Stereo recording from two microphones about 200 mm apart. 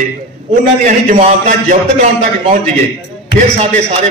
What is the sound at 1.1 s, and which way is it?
Speech, 35° right (ahead or behind).